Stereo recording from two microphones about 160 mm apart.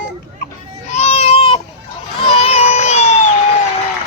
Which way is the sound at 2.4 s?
40° left (ahead or behind).